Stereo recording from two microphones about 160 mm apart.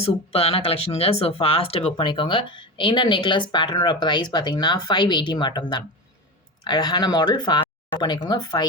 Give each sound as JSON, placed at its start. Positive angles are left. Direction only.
{"t": 0.0, "sound": "speech", "side_deg": 40}